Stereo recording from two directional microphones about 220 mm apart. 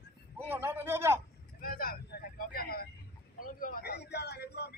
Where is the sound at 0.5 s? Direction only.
10° right (ahead or behind).